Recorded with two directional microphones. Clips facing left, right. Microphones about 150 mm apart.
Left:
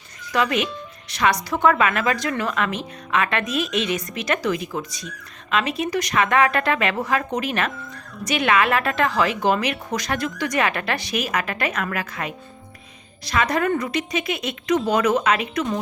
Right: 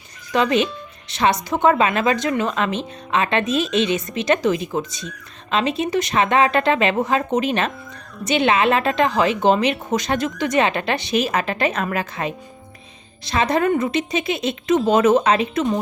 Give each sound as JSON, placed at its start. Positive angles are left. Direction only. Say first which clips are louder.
{"t": 0.3, "sound": "speech", "louder": "right 4 dB", "side_deg": -25}